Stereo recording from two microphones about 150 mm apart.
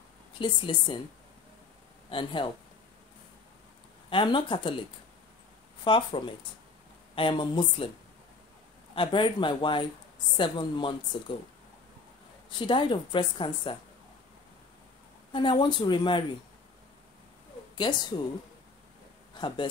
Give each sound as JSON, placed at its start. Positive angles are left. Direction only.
{"t": 0.3, "sound": "a woman's voice", "side_deg": 35}
{"t": 2.0, "sound": "a woman's voice", "side_deg": 35}
{"t": 4.1, "sound": "a woman's voice", "side_deg": 35}
{"t": 5.9, "sound": "a woman's voice", "side_deg": 35}
{"t": 8.9, "sound": "a woman's voice", "side_deg": 35}
{"t": 12.4, "sound": "a woman's voice", "side_deg": 35}
{"t": 15.3, "sound": "a woman's voice", "side_deg": 30}
{"t": 17.9, "sound": "a woman's voice", "side_deg": 30}
{"t": 19.4, "sound": "a woman's voice", "side_deg": 30}